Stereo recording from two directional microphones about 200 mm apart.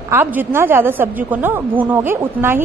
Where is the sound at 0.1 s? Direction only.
10° right (ahead or behind).